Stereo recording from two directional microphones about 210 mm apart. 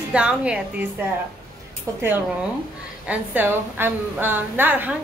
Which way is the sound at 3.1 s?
10° right (ahead or behind).